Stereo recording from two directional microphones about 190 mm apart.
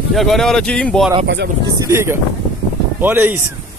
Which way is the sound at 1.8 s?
15° right (ahead or behind).